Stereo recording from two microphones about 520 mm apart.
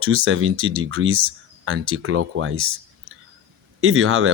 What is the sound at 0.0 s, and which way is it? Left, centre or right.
Speech, right.